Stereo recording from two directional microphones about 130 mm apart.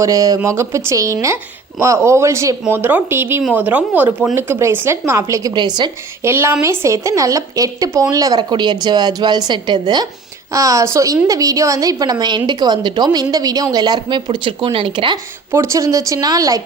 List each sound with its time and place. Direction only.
0.0 s a woman's voice: 25° right (ahead or behind)
6.2 s a woman's voice: 20° right (ahead or behind); by 15.2 s 40° right (ahead or behind)
15.5 s a woman's voice: 25° right (ahead or behind)